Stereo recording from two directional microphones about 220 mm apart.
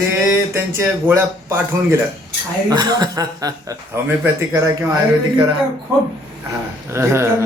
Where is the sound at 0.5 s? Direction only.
10° right (ahead or behind).